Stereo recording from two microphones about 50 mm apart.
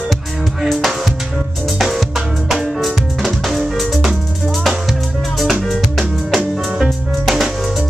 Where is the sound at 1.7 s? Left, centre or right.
Centre.